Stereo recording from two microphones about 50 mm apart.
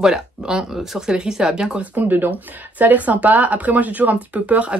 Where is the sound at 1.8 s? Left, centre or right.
Right.